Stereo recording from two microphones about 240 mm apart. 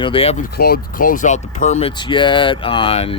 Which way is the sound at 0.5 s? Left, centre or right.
Left.